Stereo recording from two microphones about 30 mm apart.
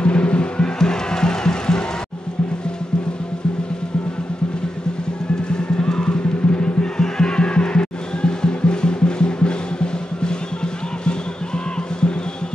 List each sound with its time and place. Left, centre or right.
0.0 s music: left
0.7 s music: left
5.5 s music: left